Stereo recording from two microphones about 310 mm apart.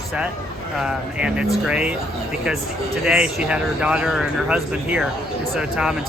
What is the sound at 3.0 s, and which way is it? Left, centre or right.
Speech, centre.